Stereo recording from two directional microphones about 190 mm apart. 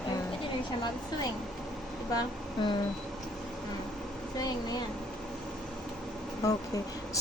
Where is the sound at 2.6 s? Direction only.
25° left (ahead or behind).